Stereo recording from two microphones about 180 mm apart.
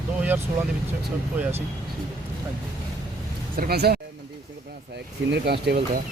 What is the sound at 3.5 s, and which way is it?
Speech, 60° right (ahead or behind).